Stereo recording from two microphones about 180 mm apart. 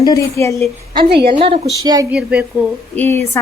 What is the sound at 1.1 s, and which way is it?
Speech, 65° right (ahead or behind).